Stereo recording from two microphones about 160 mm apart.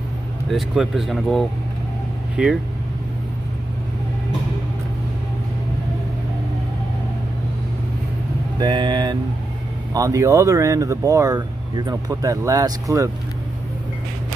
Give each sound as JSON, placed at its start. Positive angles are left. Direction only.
{"t": 0.5, "sound": "speech", "side_deg": 0}
{"t": 8.5, "sound": "speech", "side_deg": -30}